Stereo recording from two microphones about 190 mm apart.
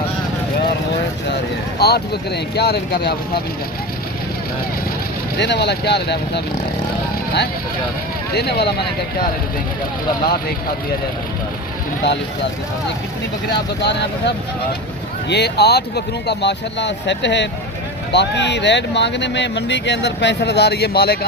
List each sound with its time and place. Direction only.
1.8 s speech: 60° left (ahead or behind)
5.4 s speech: 65° left (ahead or behind)
8.3 s speech: 60° left (ahead or behind)
13.5 s speech: 60° left (ahead or behind)